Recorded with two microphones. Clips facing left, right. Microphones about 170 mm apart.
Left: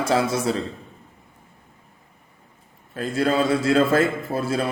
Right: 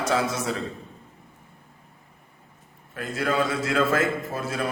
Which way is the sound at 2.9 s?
30° left (ahead or behind).